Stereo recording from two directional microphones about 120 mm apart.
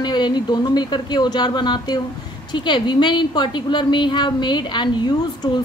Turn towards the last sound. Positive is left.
turn(degrees=40)  # may be behind; listen again after turning